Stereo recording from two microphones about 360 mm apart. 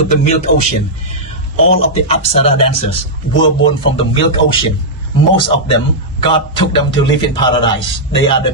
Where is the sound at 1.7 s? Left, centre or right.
Centre.